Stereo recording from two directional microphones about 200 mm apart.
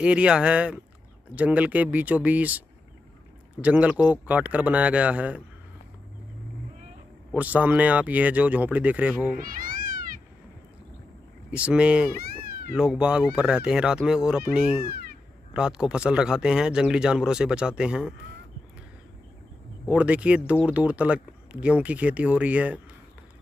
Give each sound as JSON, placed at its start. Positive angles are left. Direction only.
{"t": 0.0, "sound": "speech", "side_deg": -5}
{"t": 3.6, "sound": "speech", "side_deg": -5}
{"t": 7.3, "sound": "speech", "side_deg": -10}
{"t": 9.4, "sound": "cat", "side_deg": -45}
{"t": 11.5, "sound": "speech", "side_deg": -5}
{"t": 19.9, "sound": "speech", "side_deg": -5}